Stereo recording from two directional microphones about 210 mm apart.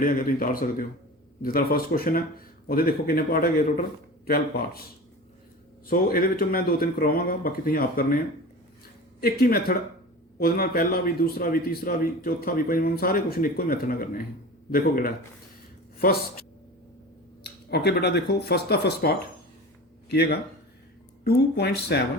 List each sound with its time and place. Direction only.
0.0 s a man's voice: 40° left (ahead or behind)
5.9 s a man's voice: 45° left (ahead or behind)
9.2 s a man's voice: 45° left (ahead or behind)